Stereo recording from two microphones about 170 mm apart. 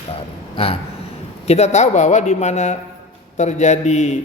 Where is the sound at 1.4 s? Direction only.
40° left (ahead or behind).